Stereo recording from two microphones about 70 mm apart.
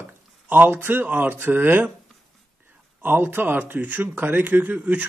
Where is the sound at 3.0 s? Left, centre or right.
Right.